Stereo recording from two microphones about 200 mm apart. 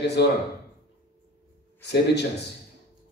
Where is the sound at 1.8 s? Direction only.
55° left (ahead or behind).